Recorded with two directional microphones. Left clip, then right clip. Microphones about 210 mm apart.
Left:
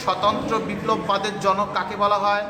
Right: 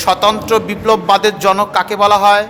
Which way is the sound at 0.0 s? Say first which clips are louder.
Right 9 dB; 50° right (ahead or behind).